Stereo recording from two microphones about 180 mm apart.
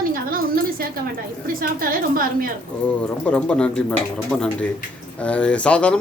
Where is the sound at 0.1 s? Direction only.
55° right (ahead or behind).